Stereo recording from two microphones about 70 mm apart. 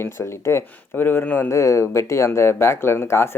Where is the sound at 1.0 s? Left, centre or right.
Left.